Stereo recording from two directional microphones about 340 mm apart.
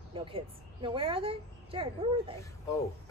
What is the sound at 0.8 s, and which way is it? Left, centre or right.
Speech, centre.